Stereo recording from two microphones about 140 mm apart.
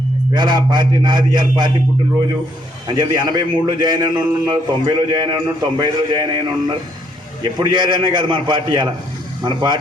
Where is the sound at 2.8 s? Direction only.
30° right (ahead or behind).